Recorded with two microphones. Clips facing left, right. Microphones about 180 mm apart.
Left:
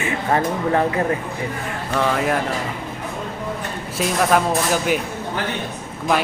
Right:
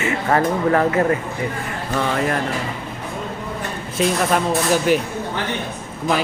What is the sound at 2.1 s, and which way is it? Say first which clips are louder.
Speech: even; 5° left (ahead or behind).